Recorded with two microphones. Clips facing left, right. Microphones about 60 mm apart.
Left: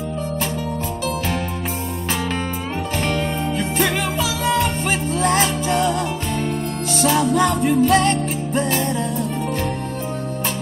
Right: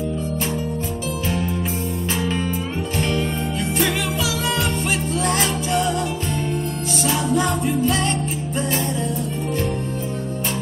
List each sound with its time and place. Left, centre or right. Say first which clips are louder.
3.0 s music: even; left
7.0 s music: left 4 dB; left